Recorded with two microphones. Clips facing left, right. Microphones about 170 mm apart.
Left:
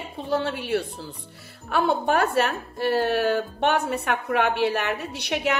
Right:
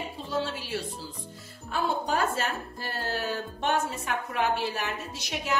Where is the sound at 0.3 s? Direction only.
60° left (ahead or behind).